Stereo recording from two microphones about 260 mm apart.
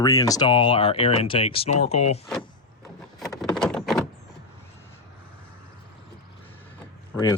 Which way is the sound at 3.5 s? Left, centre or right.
Centre.